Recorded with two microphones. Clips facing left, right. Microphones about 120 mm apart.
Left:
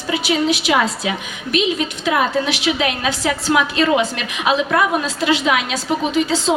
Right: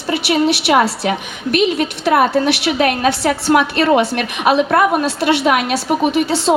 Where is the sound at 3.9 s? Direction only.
50° right (ahead or behind).